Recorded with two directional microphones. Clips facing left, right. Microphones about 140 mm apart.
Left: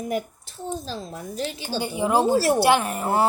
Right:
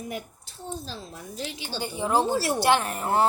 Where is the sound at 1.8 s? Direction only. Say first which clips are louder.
Left 3 dB; 10° left (ahead or behind).